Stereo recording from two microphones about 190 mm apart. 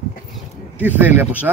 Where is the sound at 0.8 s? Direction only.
10° right (ahead or behind).